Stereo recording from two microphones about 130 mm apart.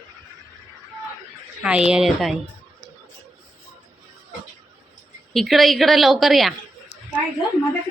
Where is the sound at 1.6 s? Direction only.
5° right (ahead or behind).